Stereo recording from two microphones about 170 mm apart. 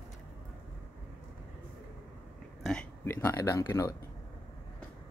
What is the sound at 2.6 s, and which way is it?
Speech, 5° left (ahead or behind).